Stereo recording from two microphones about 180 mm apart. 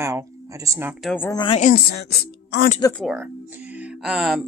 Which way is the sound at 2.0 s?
65° left (ahead or behind).